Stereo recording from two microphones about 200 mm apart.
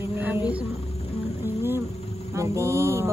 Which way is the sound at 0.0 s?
10° right (ahead or behind).